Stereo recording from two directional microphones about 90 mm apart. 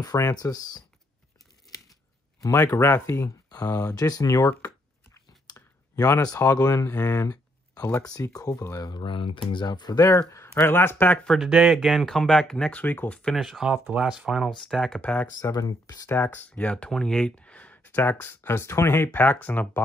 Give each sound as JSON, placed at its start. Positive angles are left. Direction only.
{"t": 0.2, "sound": "speech", "side_deg": 45}
{"t": 2.4, "sound": "speech", "side_deg": 30}
{"t": 4.5, "sound": "a sound", "side_deg": 30}
{"t": 5.5, "sound": "speech", "side_deg": 35}
{"t": 7.2, "sound": "a sound", "side_deg": 45}
{"t": 8.1, "sound": "speech", "side_deg": 40}
{"t": 8.8, "sound": "speech", "side_deg": 60}
{"t": 10.3, "sound": "speech", "side_deg": 30}
{"t": 11.2, "sound": "speech", "side_deg": 0}
{"t": 13.4, "sound": "speech", "side_deg": -5}
{"t": 15.0, "sound": "speech", "side_deg": 15}
{"t": 15.5, "sound": "speech", "side_deg": 45}
{"t": 16.1, "sound": "speech", "side_deg": 20}